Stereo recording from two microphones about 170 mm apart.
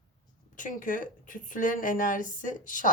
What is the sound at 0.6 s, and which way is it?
Speech, 50° left (ahead or behind).